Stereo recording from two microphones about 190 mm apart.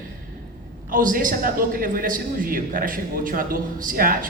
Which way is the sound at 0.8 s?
45° right (ahead or behind).